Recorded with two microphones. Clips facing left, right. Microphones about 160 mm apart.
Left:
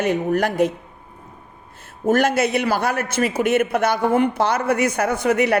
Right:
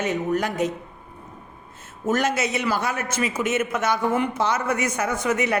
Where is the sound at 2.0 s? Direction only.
60° left (ahead or behind).